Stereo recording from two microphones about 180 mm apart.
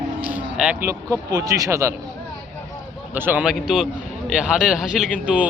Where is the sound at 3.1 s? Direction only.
10° right (ahead or behind).